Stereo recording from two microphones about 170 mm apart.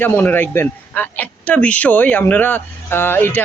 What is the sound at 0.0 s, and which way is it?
Speech, 10° left (ahead or behind).